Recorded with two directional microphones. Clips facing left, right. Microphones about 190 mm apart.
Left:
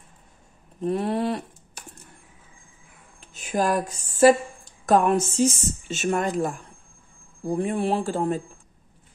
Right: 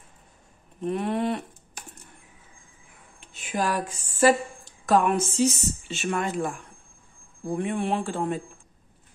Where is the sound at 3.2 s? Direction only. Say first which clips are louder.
Left 4 dB; 40° left (ahead or behind).